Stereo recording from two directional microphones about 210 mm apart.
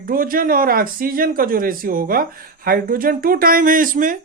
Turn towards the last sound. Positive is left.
turn(degrees=-40)  # may be behind; listen again after turning